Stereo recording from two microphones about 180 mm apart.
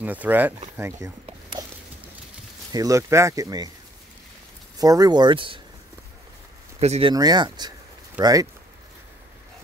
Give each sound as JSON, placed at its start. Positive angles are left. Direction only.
{"t": 0.0, "sound": "speech", "side_deg": -10}
{"t": 2.7, "sound": "speech", "side_deg": -20}
{"t": 4.7, "sound": "speech", "side_deg": -20}
{"t": 6.8, "sound": "speech", "side_deg": -35}